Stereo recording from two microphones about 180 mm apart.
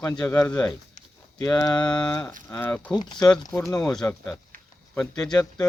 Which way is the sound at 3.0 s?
25° left (ahead or behind).